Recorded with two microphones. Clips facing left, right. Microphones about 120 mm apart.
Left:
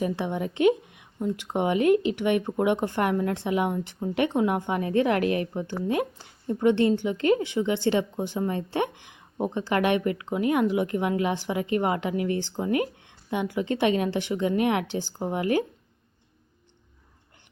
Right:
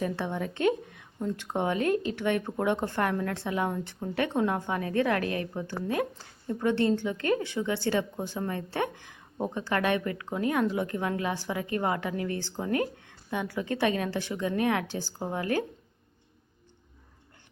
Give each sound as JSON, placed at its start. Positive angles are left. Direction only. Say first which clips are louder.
{"t": 0.0, "sound": "a woman's voice", "louder": "left 3 dB", "side_deg": 15}